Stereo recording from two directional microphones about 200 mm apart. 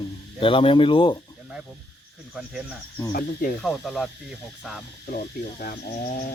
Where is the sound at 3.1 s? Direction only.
45° left (ahead or behind).